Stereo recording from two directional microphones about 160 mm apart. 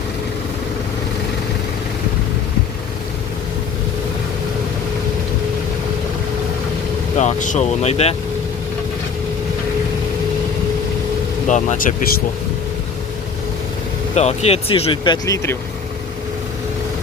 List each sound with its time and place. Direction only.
7.2 s speech: 50° left (ahead or behind)
11.4 s speech: 50° left (ahead or behind)
14.2 s speech: 40° left (ahead or behind)